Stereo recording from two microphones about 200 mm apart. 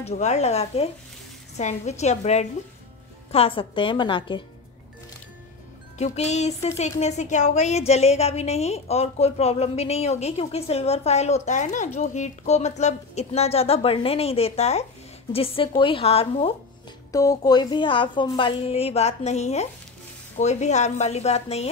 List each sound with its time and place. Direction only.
0.0 s a woman's voice: 35° left (ahead or behind)
5.9 s a woman's voice: 35° left (ahead or behind)
17.1 s a woman's voice: 15° left (ahead or behind)